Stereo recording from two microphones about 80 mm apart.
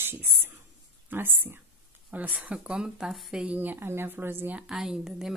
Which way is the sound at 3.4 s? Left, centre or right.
Right.